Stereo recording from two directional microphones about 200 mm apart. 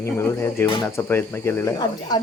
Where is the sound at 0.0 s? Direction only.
10° left (ahead or behind).